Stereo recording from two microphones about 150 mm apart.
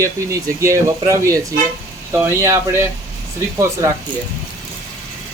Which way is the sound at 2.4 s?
15° right (ahead or behind).